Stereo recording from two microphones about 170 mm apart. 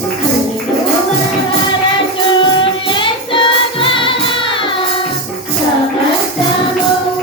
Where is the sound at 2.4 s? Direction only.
30° left (ahead or behind).